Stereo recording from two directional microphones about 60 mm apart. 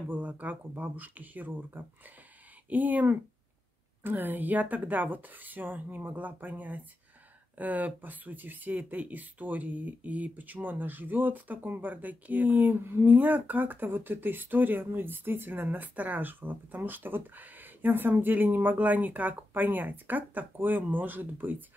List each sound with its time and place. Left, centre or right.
0.1 s speech: right